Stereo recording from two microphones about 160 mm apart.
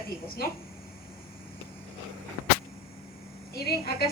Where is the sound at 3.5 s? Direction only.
75° left (ahead or behind).